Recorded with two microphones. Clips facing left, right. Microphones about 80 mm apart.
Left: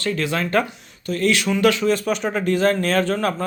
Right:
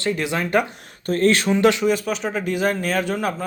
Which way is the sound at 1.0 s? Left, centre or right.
Right.